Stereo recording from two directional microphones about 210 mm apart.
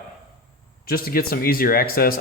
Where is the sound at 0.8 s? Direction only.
45° left (ahead or behind).